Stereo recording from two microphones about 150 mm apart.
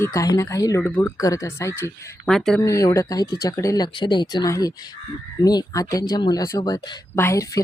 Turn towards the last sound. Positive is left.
turn(degrees=20)  # may be behind; listen again after turning